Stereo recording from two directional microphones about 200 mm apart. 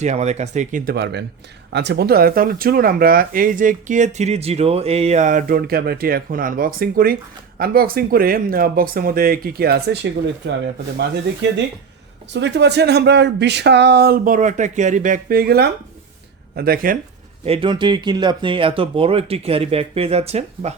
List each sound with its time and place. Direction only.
0.0 s speech: 35° right (ahead or behind); by 10.5 s 60° right (ahead or behind)
12.3 s speech: 60° right (ahead or behind); by 17.0 s 45° right (ahead or behind)
17.4 s speech: 25° right (ahead or behind)